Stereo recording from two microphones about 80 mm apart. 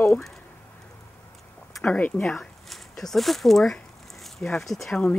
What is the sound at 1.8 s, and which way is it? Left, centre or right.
Speech, centre.